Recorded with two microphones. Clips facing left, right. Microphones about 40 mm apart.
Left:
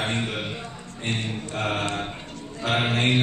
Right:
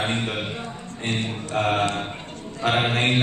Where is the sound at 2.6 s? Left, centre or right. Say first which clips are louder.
Right 2 dB; right.